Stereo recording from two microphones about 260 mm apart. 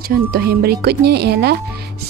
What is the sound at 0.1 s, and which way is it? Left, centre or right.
Speech, right.